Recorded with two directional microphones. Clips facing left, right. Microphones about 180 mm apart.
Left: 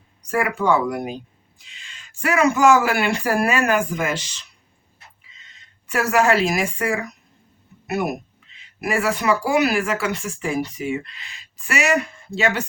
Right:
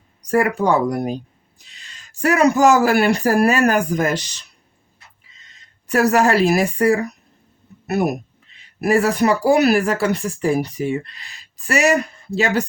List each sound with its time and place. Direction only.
0.2 s speech: 40° right (ahead or behind)
5.9 s speech: 40° right (ahead or behind)